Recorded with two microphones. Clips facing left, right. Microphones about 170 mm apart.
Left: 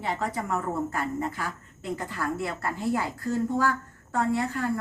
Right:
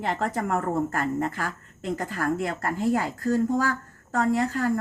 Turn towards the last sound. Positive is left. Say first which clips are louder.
# right 3 dB
turn(degrees=-40)  # may be behind; listen again after turning